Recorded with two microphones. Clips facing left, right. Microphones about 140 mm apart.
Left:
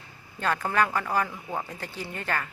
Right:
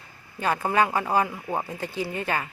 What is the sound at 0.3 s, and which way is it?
Speech, 15° right (ahead or behind).